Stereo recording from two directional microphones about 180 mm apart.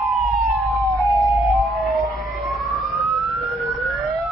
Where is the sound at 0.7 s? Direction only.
Centre (ahead or behind).